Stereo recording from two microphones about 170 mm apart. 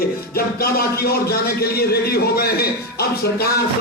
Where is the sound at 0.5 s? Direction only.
65° left (ahead or behind).